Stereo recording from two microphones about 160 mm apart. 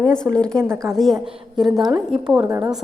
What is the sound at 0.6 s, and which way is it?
Speech, 15° right (ahead or behind).